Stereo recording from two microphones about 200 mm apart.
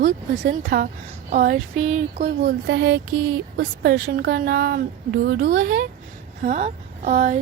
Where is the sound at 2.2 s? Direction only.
55° right (ahead or behind).